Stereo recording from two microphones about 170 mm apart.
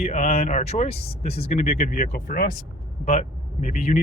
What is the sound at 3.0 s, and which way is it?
Speech, 40° left (ahead or behind).